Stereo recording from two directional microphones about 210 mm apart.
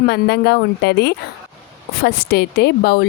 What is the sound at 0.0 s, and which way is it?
Speech, 50° left (ahead or behind).